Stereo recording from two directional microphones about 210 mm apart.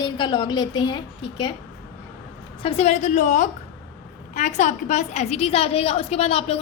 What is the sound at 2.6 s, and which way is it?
A woman's voice, 30° left (ahead or behind).